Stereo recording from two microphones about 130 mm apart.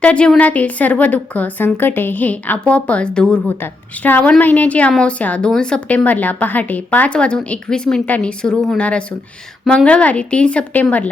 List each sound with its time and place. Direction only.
0.0 s a woman's voice: 10° left (ahead or behind)